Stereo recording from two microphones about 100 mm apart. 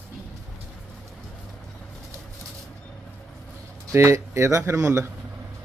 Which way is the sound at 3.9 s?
30° right (ahead or behind).